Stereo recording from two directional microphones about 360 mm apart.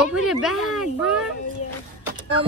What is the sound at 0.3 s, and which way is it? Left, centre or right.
Speech, centre.